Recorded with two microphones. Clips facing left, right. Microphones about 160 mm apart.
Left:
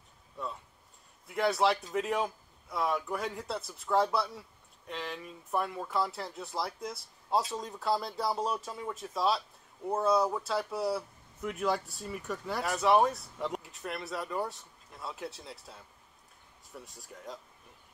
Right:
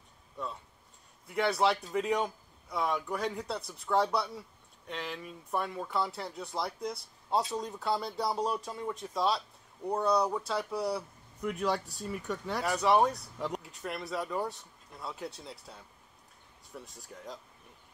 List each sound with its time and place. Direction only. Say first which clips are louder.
1.2 s speech: even; centre (ahead or behind)